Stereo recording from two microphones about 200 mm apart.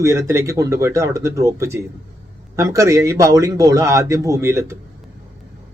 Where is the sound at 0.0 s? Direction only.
15° right (ahead or behind).